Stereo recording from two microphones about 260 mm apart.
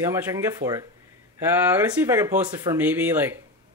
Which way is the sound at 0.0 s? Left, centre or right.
Centre.